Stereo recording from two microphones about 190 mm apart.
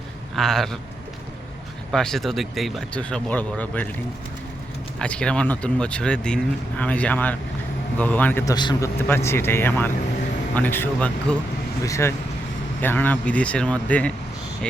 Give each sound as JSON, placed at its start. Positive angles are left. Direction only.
{"t": 0.3, "sound": "speech", "side_deg": 0}
{"t": 1.9, "sound": "speech", "side_deg": 0}
{"t": 4.9, "sound": "speech", "side_deg": 5}
{"t": 8.5, "sound": "a man's voice", "side_deg": 20}
{"t": 9.0, "sound": "speech", "side_deg": 10}